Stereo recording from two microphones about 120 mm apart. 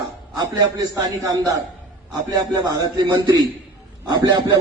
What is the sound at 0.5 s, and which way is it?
Music, 30° right (ahead or behind).